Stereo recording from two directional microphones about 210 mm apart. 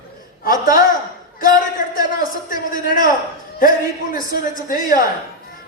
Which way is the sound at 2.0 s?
40° left (ahead or behind).